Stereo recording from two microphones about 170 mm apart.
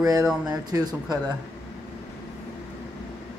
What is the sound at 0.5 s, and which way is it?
Speech, 25° right (ahead or behind).